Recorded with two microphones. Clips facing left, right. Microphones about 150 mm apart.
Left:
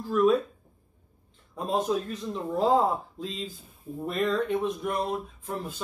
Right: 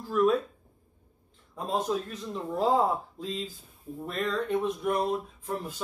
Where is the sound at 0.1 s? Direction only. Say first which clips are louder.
Left 2 dB; centre (ahead or behind).